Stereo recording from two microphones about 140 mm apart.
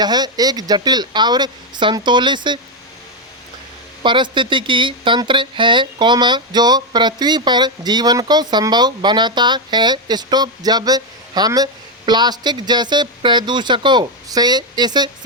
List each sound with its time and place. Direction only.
0.0 s speech: 30° right (ahead or behind)
4.0 s speech: 35° right (ahead or behind)